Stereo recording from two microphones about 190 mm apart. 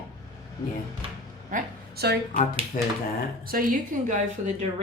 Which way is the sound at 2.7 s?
45° left (ahead or behind).